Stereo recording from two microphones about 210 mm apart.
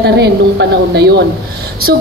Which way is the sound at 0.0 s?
50° right (ahead or behind).